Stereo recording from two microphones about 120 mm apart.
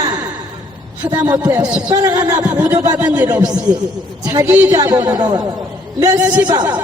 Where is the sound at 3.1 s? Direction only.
15° right (ahead or behind).